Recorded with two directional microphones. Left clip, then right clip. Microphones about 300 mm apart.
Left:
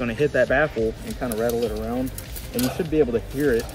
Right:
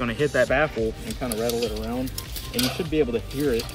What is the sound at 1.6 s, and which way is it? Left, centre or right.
Speech, centre.